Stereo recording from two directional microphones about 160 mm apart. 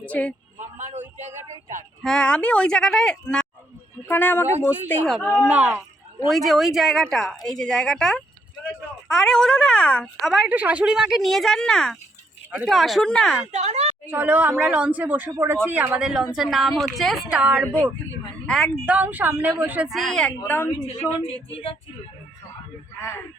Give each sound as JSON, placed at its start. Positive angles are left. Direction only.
{"t": 0.0, "sound": "a sound", "side_deg": 10}
{"t": 0.8, "sound": "a sound", "side_deg": -45}
{"t": 2.0, "sound": "speech", "side_deg": 5}
{"t": 5.0, "sound": "speech", "side_deg": -5}
{"t": 13.5, "sound": "speech", "side_deg": -45}
{"t": 14.1, "sound": "speech", "side_deg": -10}
{"t": 20.0, "sound": "speech", "side_deg": 5}
{"t": 20.8, "sound": "a woman's voice", "side_deg": 35}